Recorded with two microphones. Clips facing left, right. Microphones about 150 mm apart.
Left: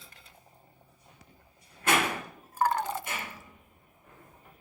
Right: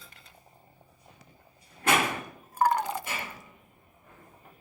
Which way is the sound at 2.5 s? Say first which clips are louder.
Right 2 dB; 15° right (ahead or behind).